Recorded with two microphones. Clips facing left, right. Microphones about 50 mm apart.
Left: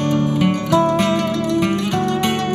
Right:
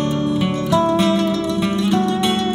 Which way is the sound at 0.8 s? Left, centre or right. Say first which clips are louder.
Even; left.